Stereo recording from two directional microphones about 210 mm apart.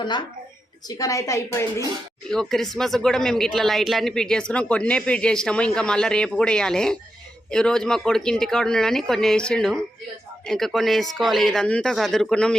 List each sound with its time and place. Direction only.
0.0 s a woman's voice: 20° left (ahead or behind)
2.3 s speech: centre (ahead or behind)